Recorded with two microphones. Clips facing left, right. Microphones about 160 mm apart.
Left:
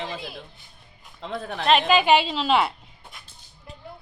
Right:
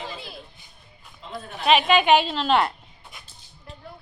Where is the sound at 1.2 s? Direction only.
75° left (ahead or behind).